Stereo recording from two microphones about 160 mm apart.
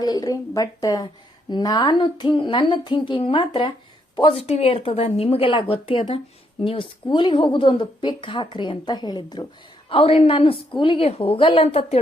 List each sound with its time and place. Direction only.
0.0 s a woman's voice: 25° left (ahead or behind); by 11.9 s 40° left (ahead or behind)